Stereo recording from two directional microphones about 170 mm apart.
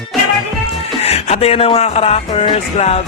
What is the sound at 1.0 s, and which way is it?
Speech, 40° left (ahead or behind).